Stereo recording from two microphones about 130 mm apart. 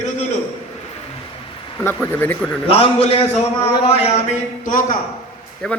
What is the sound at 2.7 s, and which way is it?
A man's voice, 50° left (ahead or behind).